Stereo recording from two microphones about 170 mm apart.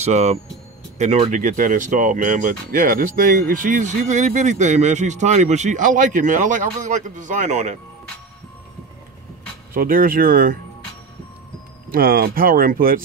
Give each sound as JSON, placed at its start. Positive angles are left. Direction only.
{"t": 0.0, "sound": "speech", "side_deg": -40}
{"t": 9.8, "sound": "speech", "side_deg": -55}
{"t": 11.9, "sound": "speech", "side_deg": -60}